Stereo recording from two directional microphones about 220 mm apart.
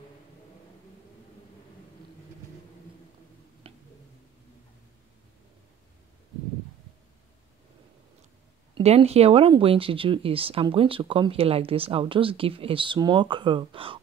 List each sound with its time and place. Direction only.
3.6 s tick: 25° right (ahead or behind)
8.7 s speech: 30° right (ahead or behind)